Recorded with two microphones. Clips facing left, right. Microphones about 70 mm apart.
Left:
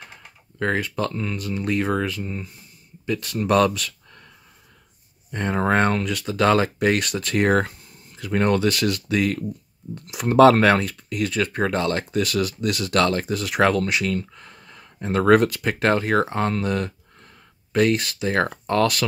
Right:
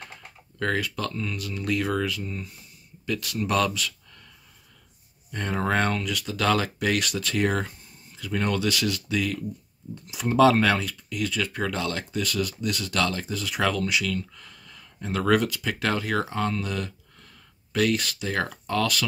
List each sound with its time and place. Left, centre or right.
0.6 s speech: left
5.3 s speech: left